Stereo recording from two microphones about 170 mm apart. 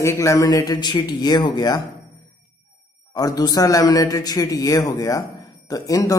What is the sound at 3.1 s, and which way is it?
A man's voice, 20° left (ahead or behind).